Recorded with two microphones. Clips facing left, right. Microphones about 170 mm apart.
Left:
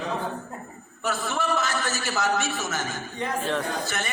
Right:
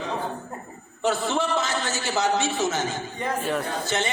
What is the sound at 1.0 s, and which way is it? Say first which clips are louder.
A man's voice: right 3 dB; 20° right (ahead or behind).